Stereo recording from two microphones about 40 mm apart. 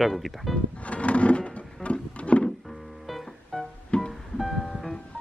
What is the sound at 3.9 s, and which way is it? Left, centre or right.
Music, left.